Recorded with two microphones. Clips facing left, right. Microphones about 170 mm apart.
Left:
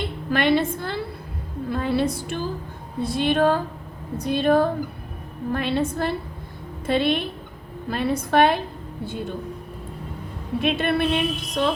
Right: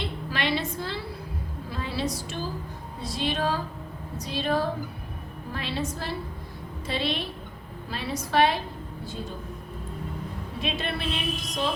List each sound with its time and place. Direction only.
0.0 s a woman's voice: 55° left (ahead or behind)
10.6 s a woman's voice: 55° left (ahead or behind)